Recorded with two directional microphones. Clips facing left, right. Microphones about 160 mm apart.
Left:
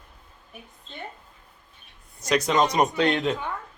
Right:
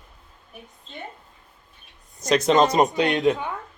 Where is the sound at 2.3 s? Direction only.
25° right (ahead or behind).